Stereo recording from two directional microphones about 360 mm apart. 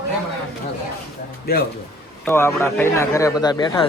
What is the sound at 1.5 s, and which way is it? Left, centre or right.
Speech, left.